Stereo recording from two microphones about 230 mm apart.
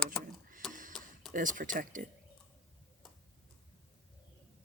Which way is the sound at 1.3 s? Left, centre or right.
Right.